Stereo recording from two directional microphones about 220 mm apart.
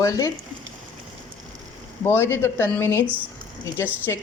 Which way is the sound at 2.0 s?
10° left (ahead or behind).